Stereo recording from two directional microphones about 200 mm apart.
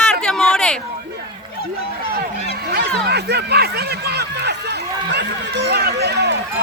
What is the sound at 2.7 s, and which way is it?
Speech, 55° right (ahead or behind).